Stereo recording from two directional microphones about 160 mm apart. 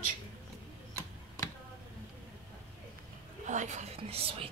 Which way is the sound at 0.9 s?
20° left (ahead or behind).